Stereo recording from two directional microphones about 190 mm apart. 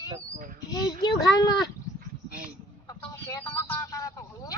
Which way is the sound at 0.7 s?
20° left (ahead or behind).